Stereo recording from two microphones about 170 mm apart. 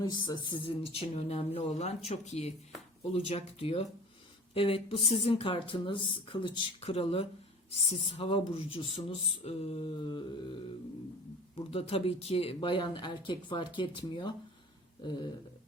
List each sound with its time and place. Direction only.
0.0 s speech: 25° left (ahead or behind)
11.7 s speech: 35° left (ahead or behind)